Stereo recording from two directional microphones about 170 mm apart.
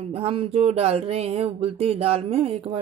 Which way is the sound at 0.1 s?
35° right (ahead or behind).